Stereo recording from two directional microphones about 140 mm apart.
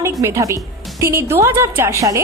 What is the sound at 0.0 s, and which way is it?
A woman's voice, 20° right (ahead or behind).